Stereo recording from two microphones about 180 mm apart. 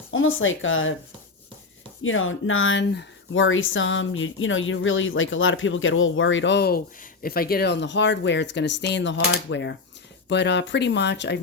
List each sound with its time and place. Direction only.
0.1 s speech: 90° left
2.0 s speech: 90° left; by 11.3 s 70° left (ahead or behind)